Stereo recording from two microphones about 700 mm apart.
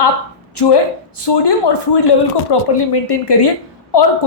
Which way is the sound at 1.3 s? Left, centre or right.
Left.